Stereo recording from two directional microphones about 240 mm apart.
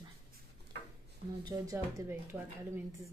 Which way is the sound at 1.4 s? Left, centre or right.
Centre.